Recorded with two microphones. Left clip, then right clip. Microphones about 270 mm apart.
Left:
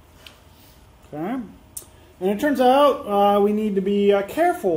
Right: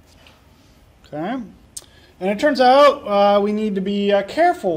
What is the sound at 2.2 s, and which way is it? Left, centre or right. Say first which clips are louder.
Speech: right 3 dB; right.